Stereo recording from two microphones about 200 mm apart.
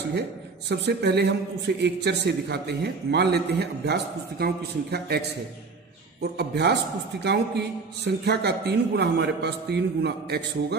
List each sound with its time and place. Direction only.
0.7 s a man's voice: 60° right (ahead or behind)
6.3 s a man's voice: 55° right (ahead or behind)